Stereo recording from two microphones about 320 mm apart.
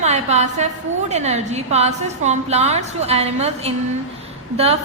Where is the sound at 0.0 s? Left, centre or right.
Right.